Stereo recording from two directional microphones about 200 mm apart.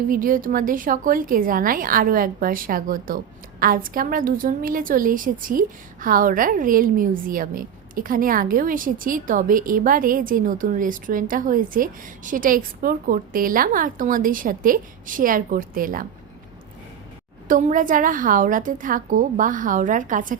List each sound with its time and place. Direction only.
0.1 s a woman's voice: 45° right (ahead or behind)
17.5 s a woman's voice: 40° right (ahead or behind)